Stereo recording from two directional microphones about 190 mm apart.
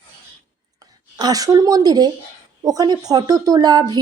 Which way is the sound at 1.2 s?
20° right (ahead or behind).